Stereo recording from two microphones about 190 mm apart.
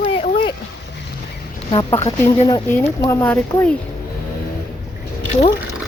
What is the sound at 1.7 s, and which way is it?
Speech, 25° left (ahead or behind).